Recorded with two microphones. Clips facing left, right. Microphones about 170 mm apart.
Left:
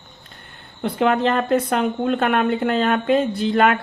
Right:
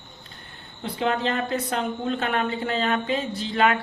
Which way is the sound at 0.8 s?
55° left (ahead or behind).